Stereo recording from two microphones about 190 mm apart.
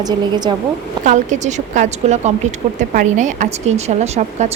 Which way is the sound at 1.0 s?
40° right (ahead or behind).